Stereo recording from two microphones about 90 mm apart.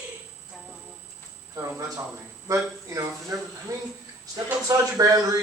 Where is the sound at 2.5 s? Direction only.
35° right (ahead or behind).